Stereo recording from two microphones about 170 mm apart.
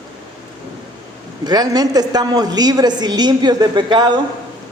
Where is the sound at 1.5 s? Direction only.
25° right (ahead or behind).